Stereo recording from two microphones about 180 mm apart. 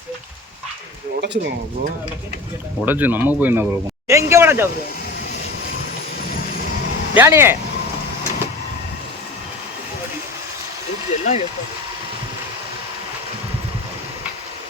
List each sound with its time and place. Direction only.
1.2 s speech: 70° right (ahead or behind)
2.8 s speech: 10° right (ahead or behind)
4.1 s a sound: 15° right (ahead or behind)
7.1 s speech: 10° right (ahead or behind)
11.1 s speech: 40° left (ahead or behind)